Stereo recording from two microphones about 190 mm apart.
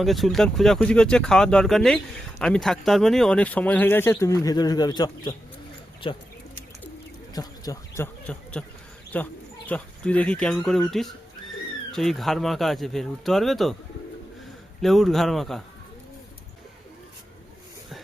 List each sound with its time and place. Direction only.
0.0 s speech: centre (ahead or behind); by 6.2 s 25° left (ahead or behind)
7.3 s speech: 20° left (ahead or behind); by 13.7 s centre (ahead or behind)
14.8 s speech: centre (ahead or behind)